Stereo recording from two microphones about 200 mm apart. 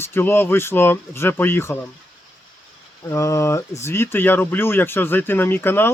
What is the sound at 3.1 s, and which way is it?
Speech, 15° left (ahead or behind).